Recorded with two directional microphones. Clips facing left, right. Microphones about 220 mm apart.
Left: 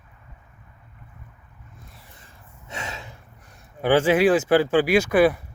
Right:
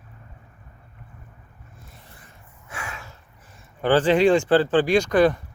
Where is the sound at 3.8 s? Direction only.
10° left (ahead or behind).